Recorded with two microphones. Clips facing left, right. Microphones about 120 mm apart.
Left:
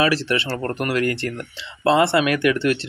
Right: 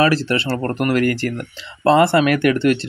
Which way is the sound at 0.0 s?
40° right (ahead or behind).